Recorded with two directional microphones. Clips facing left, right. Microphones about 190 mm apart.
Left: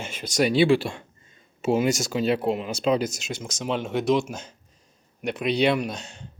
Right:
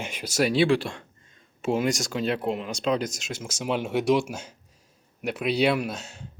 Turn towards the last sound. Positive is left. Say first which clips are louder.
# left 1 dB
turn(degrees=-5)  # may be behind; listen again after turning